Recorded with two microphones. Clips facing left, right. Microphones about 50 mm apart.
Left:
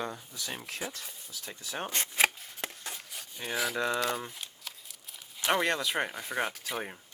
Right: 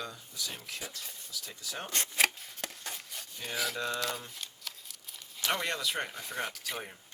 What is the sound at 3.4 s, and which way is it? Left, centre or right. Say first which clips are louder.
Speech: left 3 dB; centre.